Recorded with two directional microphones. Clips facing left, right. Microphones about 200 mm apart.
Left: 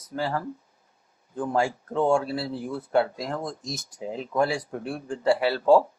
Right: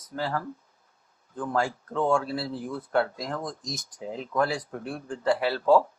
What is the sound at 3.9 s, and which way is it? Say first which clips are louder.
Speech: left 2 dB; 10° left (ahead or behind).